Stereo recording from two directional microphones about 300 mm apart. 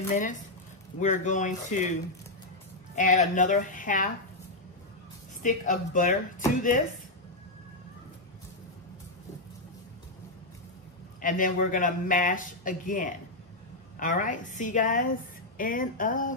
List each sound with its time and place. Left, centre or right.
0.1 s speech: left
3.0 s speech: left
5.4 s speech: left
11.1 s speech: left